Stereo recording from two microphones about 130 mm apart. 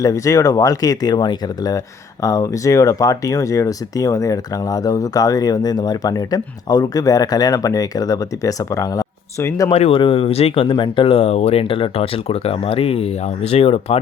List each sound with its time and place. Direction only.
0.0 s speech: 25° left (ahead or behind)
9.7 s speech: 45° left (ahead or behind)